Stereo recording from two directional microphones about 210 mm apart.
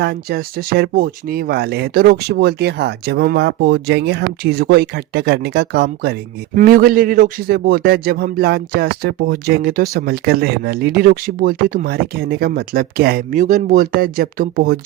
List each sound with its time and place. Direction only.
0.0 s speech: 50° right (ahead or behind)